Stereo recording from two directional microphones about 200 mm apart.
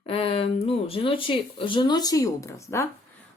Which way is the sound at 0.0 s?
30° left (ahead or behind).